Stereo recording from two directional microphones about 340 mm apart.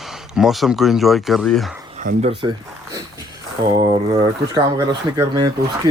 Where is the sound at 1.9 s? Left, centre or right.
Centre.